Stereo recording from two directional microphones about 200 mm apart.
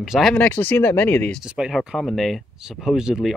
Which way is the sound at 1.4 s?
5° right (ahead or behind).